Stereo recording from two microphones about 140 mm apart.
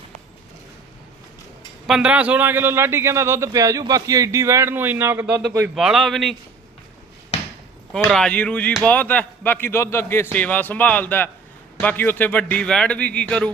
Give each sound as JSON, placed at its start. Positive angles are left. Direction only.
{"t": 1.9, "sound": "a man's voice", "side_deg": -5}
{"t": 7.9, "sound": "speech", "side_deg": 5}